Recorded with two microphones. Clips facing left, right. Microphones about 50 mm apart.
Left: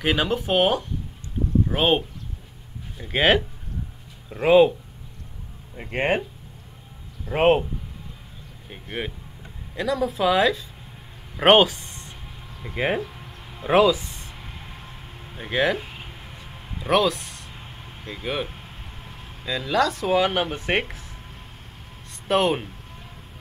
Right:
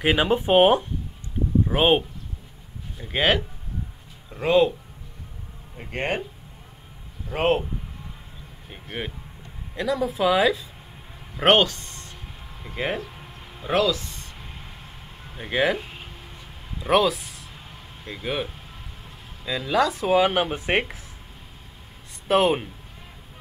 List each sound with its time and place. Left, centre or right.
0.0 s speech: centre
3.0 s speech: centre
5.8 s speech: centre
7.3 s speech: centre
9.8 s speech: centre
11.3 s speech: centre
13.6 s music: centre
15.3 s speech: centre
16.8 s speech: centre
22.3 s speech: centre